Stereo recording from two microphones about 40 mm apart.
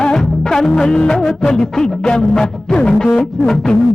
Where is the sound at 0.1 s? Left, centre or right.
Centre.